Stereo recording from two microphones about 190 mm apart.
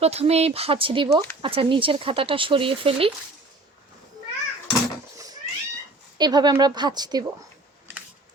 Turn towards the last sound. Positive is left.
turn(degrees=-20)  # may be behind; listen again after turning